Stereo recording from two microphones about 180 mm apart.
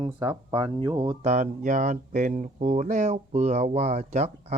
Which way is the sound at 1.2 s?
40° right (ahead or behind).